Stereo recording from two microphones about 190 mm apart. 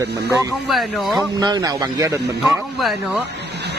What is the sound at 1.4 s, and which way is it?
Speech, 20° right (ahead or behind).